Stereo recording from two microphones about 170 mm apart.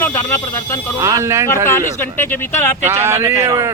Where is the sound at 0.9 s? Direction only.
20° right (ahead or behind).